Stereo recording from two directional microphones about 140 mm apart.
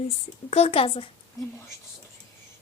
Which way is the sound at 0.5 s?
45° left (ahead or behind).